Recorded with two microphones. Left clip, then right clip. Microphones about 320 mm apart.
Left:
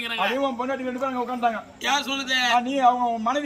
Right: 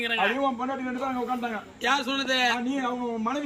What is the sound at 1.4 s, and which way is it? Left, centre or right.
A man's voice, centre.